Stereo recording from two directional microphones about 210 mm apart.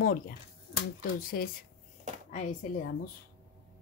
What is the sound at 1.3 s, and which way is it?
Speech, 45° left (ahead or behind).